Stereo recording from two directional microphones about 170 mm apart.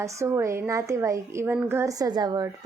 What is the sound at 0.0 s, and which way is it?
A woman's voice, 15° right (ahead or behind).